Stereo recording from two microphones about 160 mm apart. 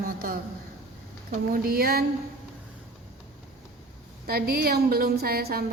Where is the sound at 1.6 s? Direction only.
70° right (ahead or behind).